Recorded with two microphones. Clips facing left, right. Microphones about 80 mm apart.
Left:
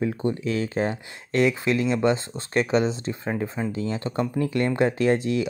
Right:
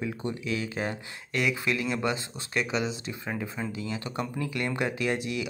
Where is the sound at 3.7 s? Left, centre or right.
Left.